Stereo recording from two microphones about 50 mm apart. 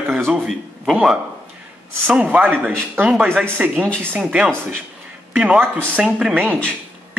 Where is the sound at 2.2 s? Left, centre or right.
Right.